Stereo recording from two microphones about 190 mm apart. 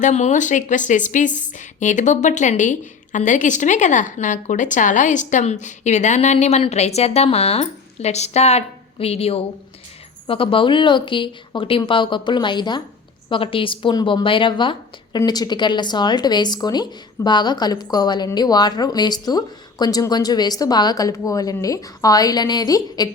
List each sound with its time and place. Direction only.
0.0 s a woman's voice: 35° left (ahead or behind); by 23.0 s 20° left (ahead or behind)